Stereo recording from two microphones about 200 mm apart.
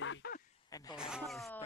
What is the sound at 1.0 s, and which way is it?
Speech, 5° right (ahead or behind).